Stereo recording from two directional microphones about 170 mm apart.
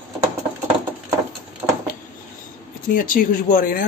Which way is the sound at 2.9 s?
55° left (ahead or behind).